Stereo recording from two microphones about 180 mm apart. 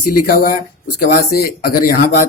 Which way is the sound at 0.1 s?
55° left (ahead or behind).